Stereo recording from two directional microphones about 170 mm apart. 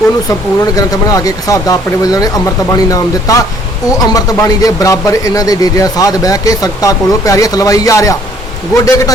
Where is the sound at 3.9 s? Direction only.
20° left (ahead or behind).